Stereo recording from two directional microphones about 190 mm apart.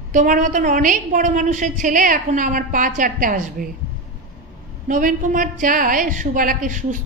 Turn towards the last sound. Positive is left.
turn(degrees=-40)  # may be behind; listen again after turning